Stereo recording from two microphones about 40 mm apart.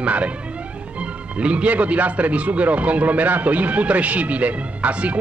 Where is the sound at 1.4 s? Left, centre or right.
Right.